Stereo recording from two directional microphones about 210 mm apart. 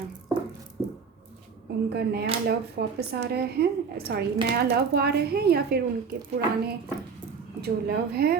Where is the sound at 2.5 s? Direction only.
50° right (ahead or behind).